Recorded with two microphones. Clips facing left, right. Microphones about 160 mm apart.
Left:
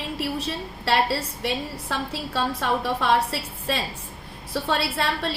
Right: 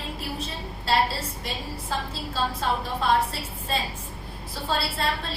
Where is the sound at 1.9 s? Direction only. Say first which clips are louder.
Left 3 dB; 70° left (ahead or behind).